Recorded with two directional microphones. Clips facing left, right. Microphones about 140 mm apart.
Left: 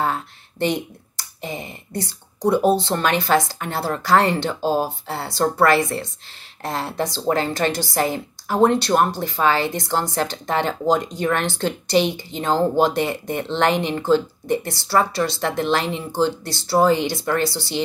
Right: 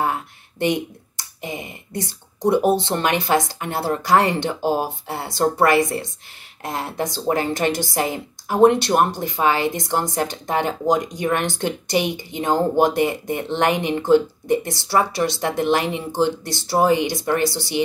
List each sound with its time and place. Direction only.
0.0 s a woman's voice: 15° right (ahead or behind)